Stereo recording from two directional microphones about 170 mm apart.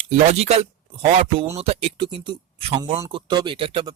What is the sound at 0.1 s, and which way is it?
Speech, 40° right (ahead or behind).